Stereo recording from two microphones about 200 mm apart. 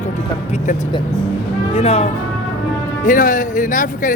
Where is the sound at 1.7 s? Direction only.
30° left (ahead or behind).